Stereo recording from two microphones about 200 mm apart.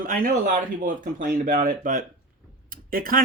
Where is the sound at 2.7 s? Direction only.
45° right (ahead or behind).